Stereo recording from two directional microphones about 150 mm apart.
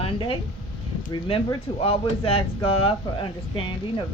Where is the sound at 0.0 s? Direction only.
35° left (ahead or behind).